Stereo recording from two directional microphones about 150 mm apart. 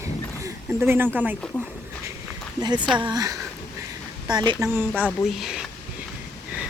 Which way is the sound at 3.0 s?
25° right (ahead or behind).